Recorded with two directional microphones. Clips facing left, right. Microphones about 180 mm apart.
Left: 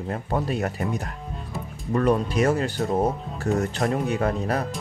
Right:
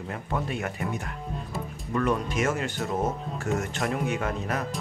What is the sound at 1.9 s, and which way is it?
Speech, 35° left (ahead or behind).